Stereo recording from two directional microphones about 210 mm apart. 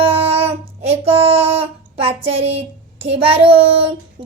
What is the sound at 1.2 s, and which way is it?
Child singing, 30° right (ahead or behind).